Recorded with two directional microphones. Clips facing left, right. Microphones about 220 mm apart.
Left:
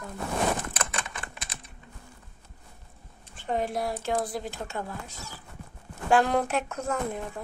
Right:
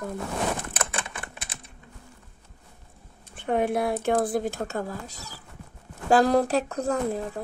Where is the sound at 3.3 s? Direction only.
60° right (ahead or behind); by 7.4 s 35° right (ahead or behind).